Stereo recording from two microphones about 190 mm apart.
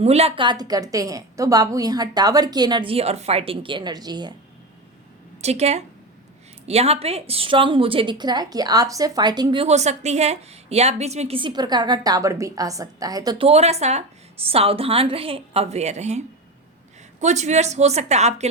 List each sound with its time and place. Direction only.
0.0 s a woman's voice: 35° right (ahead or behind)
5.4 s a woman's voice: 35° right (ahead or behind)
13.5 s a woman's voice: 35° right (ahead or behind)